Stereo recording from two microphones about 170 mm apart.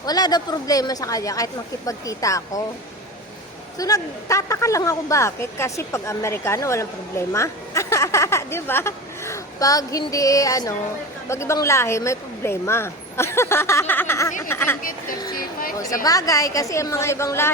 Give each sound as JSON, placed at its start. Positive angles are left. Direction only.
{"t": 0.0, "sound": "speech", "side_deg": 25}
{"t": 3.8, "sound": "speech", "side_deg": 20}
{"t": 16.0, "sound": "speech", "side_deg": 20}